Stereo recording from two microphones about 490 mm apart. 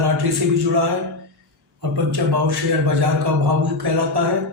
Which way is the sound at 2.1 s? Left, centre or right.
Right.